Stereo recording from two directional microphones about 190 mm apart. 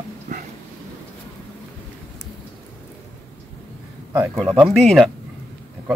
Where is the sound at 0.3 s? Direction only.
40° right (ahead or behind).